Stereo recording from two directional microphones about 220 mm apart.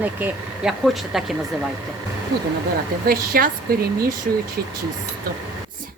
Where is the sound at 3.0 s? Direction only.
40° right (ahead or behind).